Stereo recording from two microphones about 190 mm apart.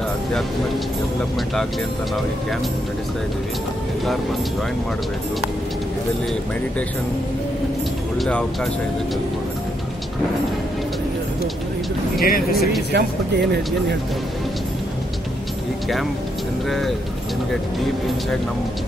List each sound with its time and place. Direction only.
8.2 s speech: 5° left (ahead or behind)
12.2 s speech: 50° left (ahead or behind)
12.9 s speech: 60° right (ahead or behind)
16.6 s speech: centre (ahead or behind)